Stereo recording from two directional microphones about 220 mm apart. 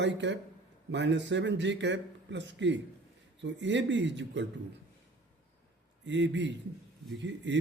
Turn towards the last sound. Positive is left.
turn(degrees=-55)  # may be behind; listen again after turning